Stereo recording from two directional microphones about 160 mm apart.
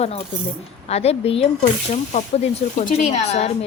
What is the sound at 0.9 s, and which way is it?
Speech, 40° left (ahead or behind).